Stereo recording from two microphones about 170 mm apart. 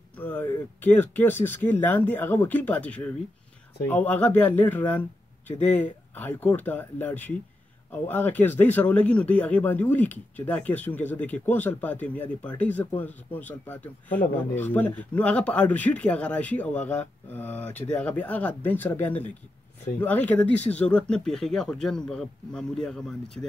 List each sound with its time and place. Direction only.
0.2 s speech: 10° left (ahead or behind)